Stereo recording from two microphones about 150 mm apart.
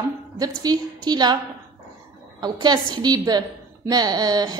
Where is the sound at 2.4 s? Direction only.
30° right (ahead or behind).